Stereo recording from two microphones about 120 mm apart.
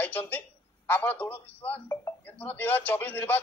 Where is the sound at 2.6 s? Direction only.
15° left (ahead or behind).